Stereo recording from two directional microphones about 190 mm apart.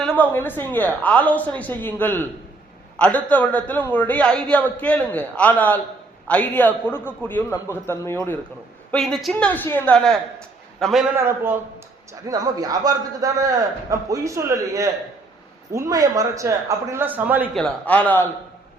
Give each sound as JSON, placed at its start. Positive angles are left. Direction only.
{"t": 0.0, "sound": "a man's voice", "side_deg": 10}
{"t": 11.2, "sound": "a man's voice", "side_deg": -15}
{"t": 17.5, "sound": "a man's voice", "side_deg": 5}